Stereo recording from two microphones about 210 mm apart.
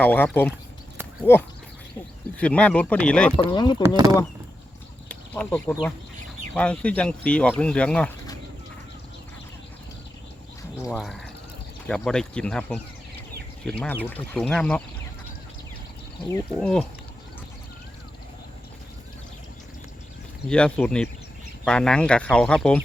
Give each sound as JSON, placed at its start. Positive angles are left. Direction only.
{"t": 0.0, "sound": "speech", "side_deg": 10}
{"t": 3.3, "sound": "speech", "side_deg": 20}
{"t": 3.8, "sound": "speech", "side_deg": -15}
{"t": 5.0, "sound": "a sound", "side_deg": 5}
{"t": 6.5, "sound": "speech", "side_deg": 5}
{"t": 10.9, "sound": "speech", "side_deg": 0}
{"t": 16.6, "sound": "speech", "side_deg": 5}
{"t": 20.5, "sound": "speech", "side_deg": 5}